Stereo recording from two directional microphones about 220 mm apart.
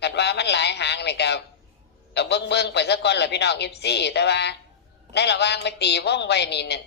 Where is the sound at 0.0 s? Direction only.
50° left (ahead or behind).